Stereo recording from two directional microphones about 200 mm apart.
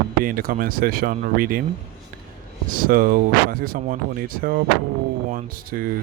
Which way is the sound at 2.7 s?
45° right (ahead or behind).